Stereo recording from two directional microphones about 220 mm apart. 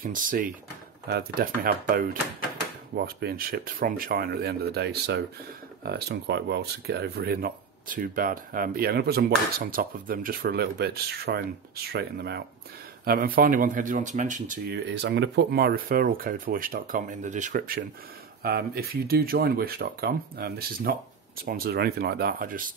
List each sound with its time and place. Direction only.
0.0 s speech: 40° right (ahead or behind)
14.9 s speech: 50° right (ahead or behind)